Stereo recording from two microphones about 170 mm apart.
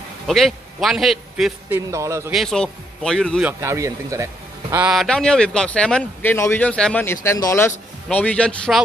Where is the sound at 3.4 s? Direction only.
15° right (ahead or behind).